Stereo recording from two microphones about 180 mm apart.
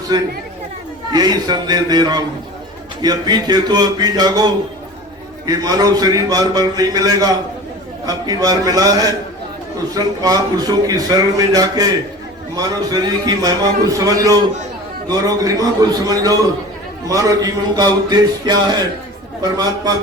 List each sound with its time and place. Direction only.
1.1 s a man's voice: 20° right (ahead or behind)